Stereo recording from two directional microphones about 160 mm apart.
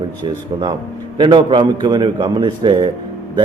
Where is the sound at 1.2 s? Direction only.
30° right (ahead or behind).